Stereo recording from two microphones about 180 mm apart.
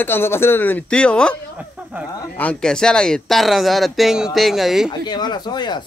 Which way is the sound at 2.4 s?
5° left (ahead or behind).